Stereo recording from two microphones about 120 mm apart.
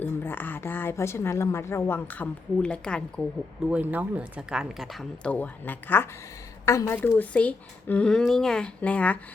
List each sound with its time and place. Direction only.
0.0 s speech: 15° left (ahead or behind)
3.7 s speech: 10° right (ahead or behind)
5.3 s speech: 15° left (ahead or behind)